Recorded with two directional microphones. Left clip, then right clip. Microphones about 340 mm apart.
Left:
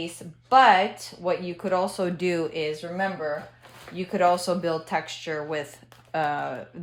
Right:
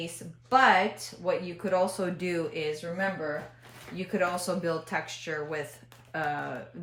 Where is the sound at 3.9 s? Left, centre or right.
Centre.